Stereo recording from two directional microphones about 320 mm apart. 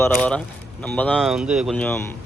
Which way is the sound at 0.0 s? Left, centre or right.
Centre.